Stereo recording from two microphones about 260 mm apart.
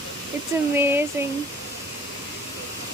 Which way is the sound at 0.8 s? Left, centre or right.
Centre.